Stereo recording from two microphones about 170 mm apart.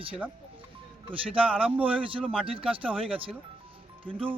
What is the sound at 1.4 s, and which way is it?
Speech, 10° right (ahead or behind).